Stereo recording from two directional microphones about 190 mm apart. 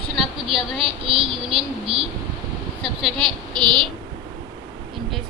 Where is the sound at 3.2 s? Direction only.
25° right (ahead or behind).